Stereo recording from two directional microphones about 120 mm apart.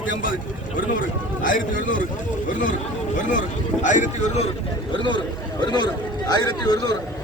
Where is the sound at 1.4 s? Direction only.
90° left.